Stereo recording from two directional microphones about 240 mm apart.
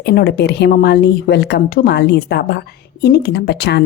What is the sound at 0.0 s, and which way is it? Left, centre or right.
A woman's voice, left.